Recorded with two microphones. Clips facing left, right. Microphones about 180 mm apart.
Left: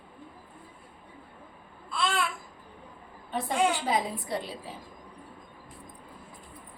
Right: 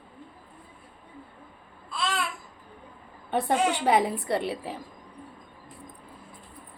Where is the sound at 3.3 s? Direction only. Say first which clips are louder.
Right 2 dB; 65° right (ahead or behind).